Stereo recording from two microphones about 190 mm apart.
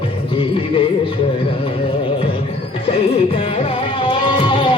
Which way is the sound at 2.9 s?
30° left (ahead or behind).